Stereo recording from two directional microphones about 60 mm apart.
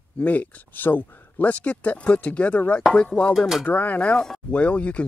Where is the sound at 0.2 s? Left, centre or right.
Left.